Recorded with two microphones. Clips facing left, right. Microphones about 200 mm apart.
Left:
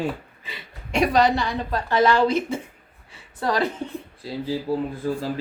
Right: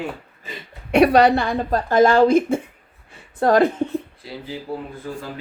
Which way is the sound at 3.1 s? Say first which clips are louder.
Right 8 dB; 50° right (ahead or behind).